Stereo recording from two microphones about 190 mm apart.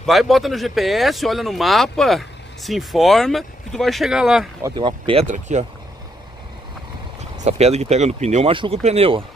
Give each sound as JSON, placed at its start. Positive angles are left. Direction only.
{"t": 0.0, "sound": "speech", "side_deg": 0}
{"t": 4.6, "sound": "speech", "side_deg": -25}
{"t": 5.3, "sound": "speech", "side_deg": -40}
{"t": 7.4, "sound": "speech", "side_deg": -35}